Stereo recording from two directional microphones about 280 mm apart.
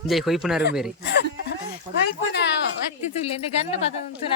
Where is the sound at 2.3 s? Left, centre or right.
Left.